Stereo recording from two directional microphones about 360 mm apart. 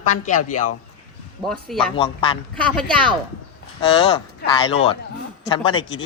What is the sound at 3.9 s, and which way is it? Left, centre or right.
Speech, centre.